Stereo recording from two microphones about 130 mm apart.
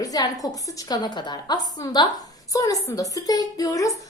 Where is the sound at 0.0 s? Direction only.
30° left (ahead or behind).